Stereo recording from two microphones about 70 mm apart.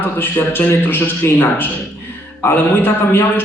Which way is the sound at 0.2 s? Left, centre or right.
Left.